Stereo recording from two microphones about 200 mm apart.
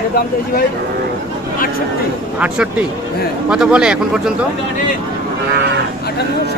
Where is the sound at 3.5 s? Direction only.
5° right (ahead or behind).